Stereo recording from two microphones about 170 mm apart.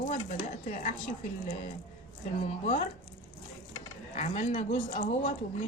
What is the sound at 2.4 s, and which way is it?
Speech, 40° left (ahead or behind).